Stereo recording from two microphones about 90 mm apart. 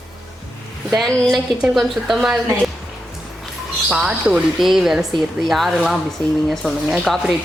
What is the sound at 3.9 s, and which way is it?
A woman's voice, 10° right (ahead or behind).